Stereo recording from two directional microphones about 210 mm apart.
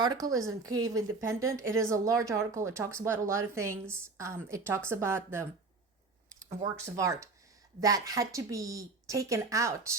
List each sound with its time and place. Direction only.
0.0 s a woman's voice: 15° right (ahead or behind)